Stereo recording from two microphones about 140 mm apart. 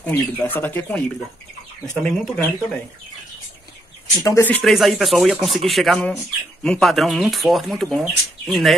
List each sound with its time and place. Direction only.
0.0 s speech: 10° left (ahead or behind)
2.0 s speech: 5° left (ahead or behind)
4.2 s speech: 25° left (ahead or behind)
4.5 s speech: 5° left (ahead or behind)